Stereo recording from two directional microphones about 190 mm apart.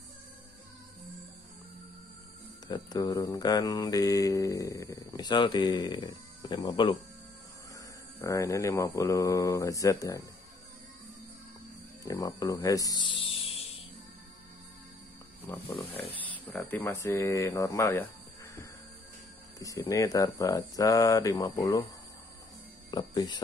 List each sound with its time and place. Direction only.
2.7 s mantra: 20° left (ahead or behind)
7.7 s speech: 15° left (ahead or behind)
12.0 s speech: 20° left (ahead or behind)
15.4 s speech: 10° left (ahead or behind)
19.6 s mantra: 15° left (ahead or behind)
22.8 s speech: 20° left (ahead or behind)